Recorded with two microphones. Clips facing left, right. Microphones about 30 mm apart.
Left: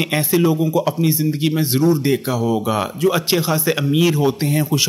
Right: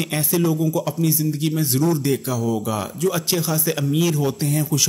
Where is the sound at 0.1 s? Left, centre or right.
Left.